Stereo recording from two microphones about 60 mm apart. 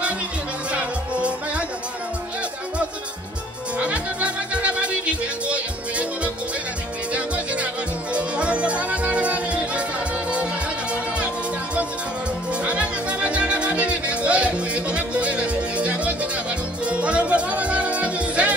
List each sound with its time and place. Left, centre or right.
3.7 s music: right
8.1 s music: centre
12.6 s music: centre